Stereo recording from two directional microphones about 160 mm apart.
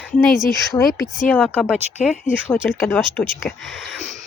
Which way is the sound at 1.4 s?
5° left (ahead or behind).